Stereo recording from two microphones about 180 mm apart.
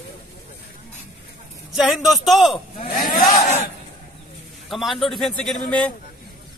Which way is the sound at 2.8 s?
50° left (ahead or behind).